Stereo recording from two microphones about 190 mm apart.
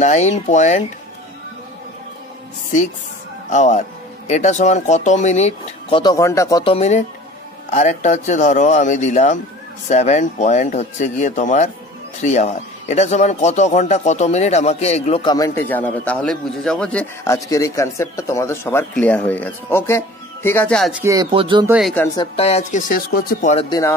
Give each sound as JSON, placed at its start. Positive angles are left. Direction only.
{"t": 0.0, "sound": "speech", "side_deg": 40}
{"t": 3.4, "sound": "speech", "side_deg": 40}
{"t": 6.6, "sound": "speech", "side_deg": 30}
{"t": 15.3, "sound": "a man's voice", "side_deg": 15}
{"t": 21.0, "sound": "speech", "side_deg": -15}
{"t": 21.6, "sound": "speech", "side_deg": -5}
{"t": 22.1, "sound": "speech", "side_deg": 25}
{"t": 23.5, "sound": "speech", "side_deg": 30}